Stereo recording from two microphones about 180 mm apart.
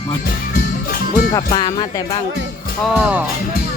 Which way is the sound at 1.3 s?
25° left (ahead or behind).